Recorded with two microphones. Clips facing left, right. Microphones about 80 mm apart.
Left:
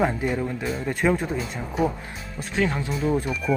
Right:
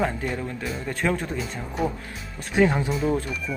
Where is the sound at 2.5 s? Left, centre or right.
Centre.